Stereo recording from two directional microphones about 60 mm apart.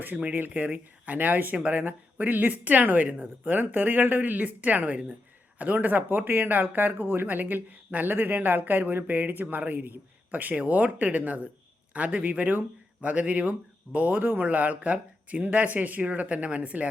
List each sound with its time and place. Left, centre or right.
0.0 s speech: right